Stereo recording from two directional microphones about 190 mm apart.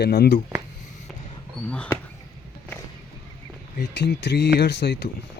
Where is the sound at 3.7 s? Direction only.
65° left (ahead or behind).